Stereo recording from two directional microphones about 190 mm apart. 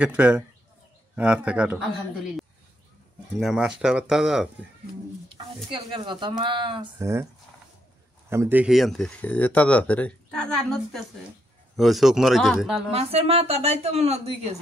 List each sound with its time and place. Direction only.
0.0 s speech: 5° right (ahead or behind)
3.3 s speech: centre (ahead or behind)
5.7 s speech: 25° right (ahead or behind)
7.0 s speech: 15° right (ahead or behind)
8.3 s speech: 10° right (ahead or behind)
12.9 s a woman's voice: 30° right (ahead or behind)